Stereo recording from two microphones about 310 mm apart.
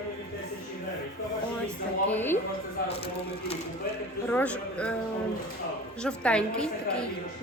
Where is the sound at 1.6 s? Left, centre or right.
Centre.